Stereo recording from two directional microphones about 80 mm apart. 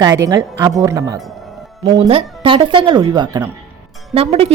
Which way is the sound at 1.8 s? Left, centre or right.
Right.